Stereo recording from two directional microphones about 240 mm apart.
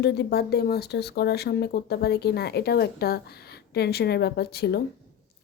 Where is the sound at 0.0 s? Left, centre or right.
Left.